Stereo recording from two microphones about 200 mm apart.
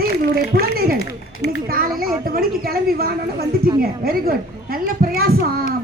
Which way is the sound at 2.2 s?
45° right (ahead or behind).